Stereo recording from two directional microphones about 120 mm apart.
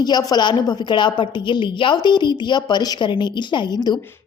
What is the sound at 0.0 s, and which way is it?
A woman's voice, 35° left (ahead or behind).